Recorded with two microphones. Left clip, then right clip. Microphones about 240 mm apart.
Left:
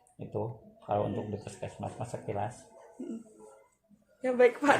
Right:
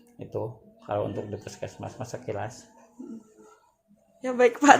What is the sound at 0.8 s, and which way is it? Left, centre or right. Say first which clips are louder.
Speech: right 2 dB; right.